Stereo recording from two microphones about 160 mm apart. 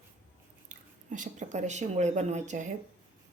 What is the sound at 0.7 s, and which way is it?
Speech, 50° right (ahead or behind).